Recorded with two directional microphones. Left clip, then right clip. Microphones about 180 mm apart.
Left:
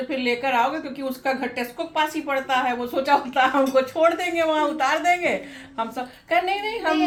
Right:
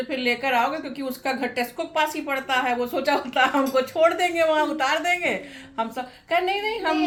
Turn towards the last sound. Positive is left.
turn(degrees=-10)  # may be behind; listen again after turning